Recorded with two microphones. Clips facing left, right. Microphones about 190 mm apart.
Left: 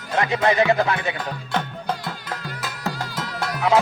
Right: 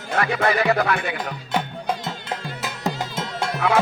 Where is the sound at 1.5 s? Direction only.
10° right (ahead or behind).